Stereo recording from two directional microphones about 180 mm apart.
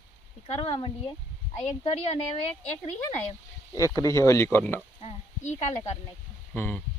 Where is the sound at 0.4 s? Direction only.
30° left (ahead or behind).